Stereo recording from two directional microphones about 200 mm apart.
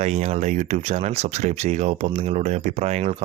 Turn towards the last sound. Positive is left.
turn(degrees=-35)  # may be behind; listen again after turning